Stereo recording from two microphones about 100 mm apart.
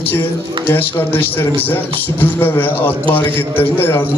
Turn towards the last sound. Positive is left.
turn(degrees=20)  # may be behind; listen again after turning